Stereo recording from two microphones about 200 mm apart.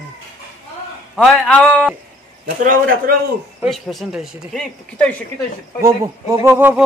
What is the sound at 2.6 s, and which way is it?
Speech, 45° right (ahead or behind).